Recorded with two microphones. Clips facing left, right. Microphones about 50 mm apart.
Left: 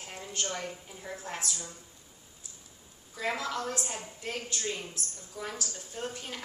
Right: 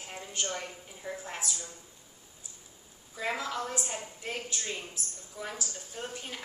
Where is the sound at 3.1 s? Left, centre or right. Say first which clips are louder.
Left 1 dB; centre.